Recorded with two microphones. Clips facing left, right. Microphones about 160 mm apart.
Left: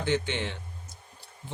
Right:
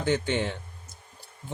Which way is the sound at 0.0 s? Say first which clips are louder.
Right 3 dB; 45° right (ahead or behind).